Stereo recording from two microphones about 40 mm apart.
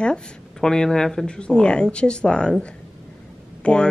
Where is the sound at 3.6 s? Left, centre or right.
Left.